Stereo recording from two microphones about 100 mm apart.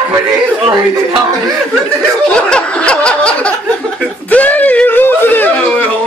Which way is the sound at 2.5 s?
10° left (ahead or behind).